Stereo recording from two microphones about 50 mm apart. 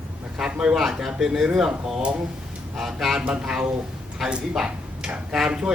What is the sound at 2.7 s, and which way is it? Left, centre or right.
Speech, centre.